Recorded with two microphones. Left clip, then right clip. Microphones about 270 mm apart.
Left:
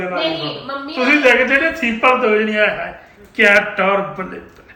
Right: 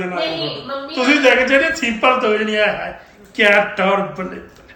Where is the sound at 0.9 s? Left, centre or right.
Centre.